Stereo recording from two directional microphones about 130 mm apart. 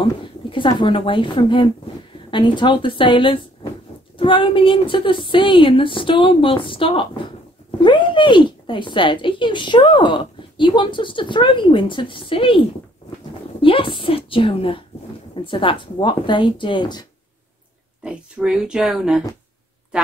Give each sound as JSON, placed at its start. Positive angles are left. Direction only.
{"t": 0.5, "sound": "a woman's voice", "side_deg": 40}
{"t": 18.0, "sound": "speech", "side_deg": -5}